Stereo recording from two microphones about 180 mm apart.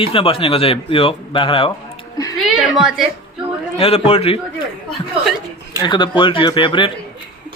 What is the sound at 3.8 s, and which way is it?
Speech, 35° left (ahead or behind).